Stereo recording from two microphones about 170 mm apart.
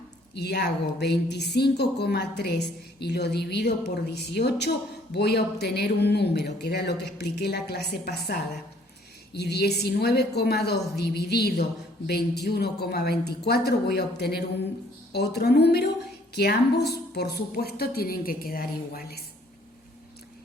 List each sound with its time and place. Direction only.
0.3 s a woman's voice: 75° left (ahead or behind); by 19.2 s 60° left (ahead or behind)